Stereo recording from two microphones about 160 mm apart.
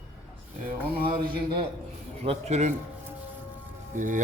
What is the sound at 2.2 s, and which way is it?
Speech, 40° right (ahead or behind).